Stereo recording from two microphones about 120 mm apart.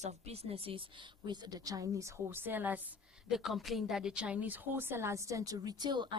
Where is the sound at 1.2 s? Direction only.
35° right (ahead or behind); by 2.8 s 15° right (ahead or behind).